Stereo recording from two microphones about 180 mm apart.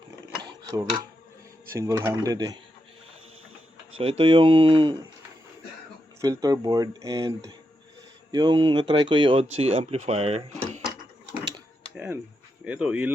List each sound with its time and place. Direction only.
0.7 s speech: 20° right (ahead or behind)
3.9 s speech: 30° right (ahead or behind)
6.2 s speech: 20° right (ahead or behind); by 10.8 s 35° right (ahead or behind)
11.9 s a sound: 10° right (ahead or behind)
12.6 s speech: 10° right (ahead or behind)